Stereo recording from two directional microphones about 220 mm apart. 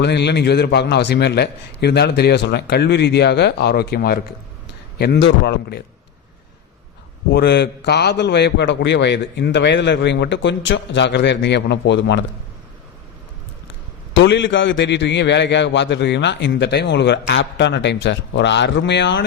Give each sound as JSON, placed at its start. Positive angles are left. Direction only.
{"t": 0.0, "sound": "a man's voice", "side_deg": 50}
{"t": 7.3, "sound": "a man's voice", "side_deg": 50}
{"t": 14.1, "sound": "a man's voice", "side_deg": 55}